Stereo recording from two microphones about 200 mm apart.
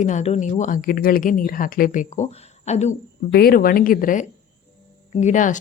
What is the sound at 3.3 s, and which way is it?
A woman's voice, 50° left (ahead or behind).